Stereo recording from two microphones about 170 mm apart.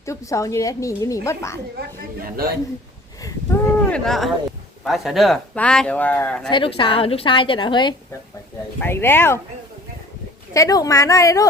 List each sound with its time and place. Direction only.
0.0 s a woman's voice: 15° left (ahead or behind)
2.2 s a man's voice: 60° right (ahead or behind)
3.2 s a sound: 20° left (ahead or behind)
3.8 s speech: 5° left (ahead or behind)
6.5 s a woman's voice: 30° left (ahead or behind)
8.8 s a woman's voice: 15° left (ahead or behind)
10.5 s a woman's voice: 20° left (ahead or behind)